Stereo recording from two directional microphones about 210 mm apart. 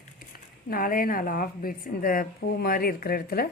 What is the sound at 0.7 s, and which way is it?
A woman's voice, 45° left (ahead or behind).